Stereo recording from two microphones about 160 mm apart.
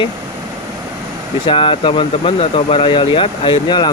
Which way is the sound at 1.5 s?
30° left (ahead or behind).